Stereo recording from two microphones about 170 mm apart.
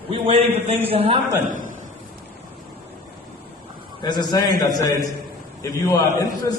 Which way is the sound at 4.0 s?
25° left (ahead or behind).